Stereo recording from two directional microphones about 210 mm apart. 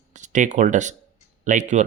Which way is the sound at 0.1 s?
35° right (ahead or behind).